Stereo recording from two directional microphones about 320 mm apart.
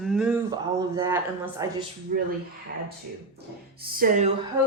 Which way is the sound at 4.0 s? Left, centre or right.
Right.